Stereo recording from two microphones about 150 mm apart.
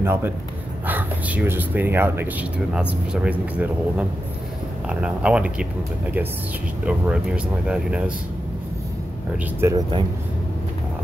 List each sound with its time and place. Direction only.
0.0 s a man's voice: 15° right (ahead or behind)
9.6 s speech: 20° right (ahead or behind)